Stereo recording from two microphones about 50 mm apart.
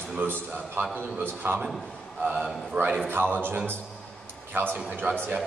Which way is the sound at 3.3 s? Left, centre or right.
Right.